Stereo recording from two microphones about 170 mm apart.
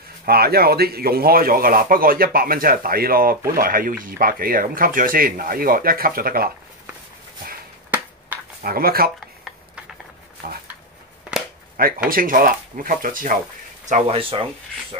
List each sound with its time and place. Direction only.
0.2 s speech: 65° right (ahead or behind)
8.3 s a sound: 10° right (ahead or behind)
8.6 s speech: 60° right (ahead or behind)
12.1 s speech: 55° right (ahead or behind)
13.8 s speech: 40° right (ahead or behind)